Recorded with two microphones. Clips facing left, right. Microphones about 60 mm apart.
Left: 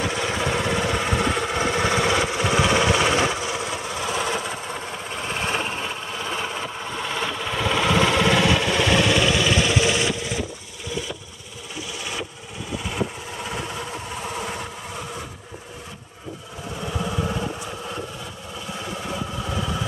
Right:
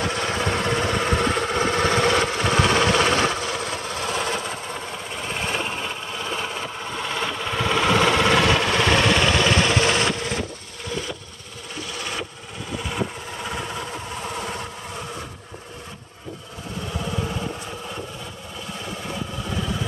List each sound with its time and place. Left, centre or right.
0.0 s vehicle: centre
8.5 s a sound: right
12.9 s vehicle: centre